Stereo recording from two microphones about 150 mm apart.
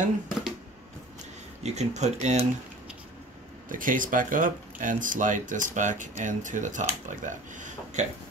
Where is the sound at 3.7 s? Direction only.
65° right (ahead or behind).